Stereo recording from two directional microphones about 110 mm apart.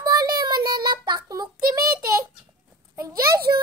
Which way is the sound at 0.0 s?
35° right (ahead or behind).